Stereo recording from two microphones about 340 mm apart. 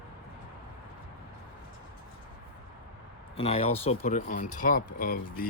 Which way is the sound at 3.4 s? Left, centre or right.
Centre.